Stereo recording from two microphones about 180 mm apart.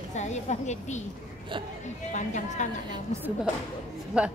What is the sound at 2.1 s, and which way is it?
Speech, 40° left (ahead or behind).